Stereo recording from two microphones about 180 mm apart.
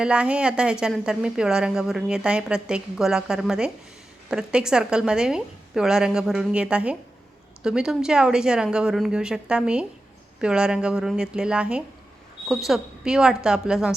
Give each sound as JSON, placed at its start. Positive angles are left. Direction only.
{"t": 0.0, "sound": "a woman's voice", "side_deg": -5}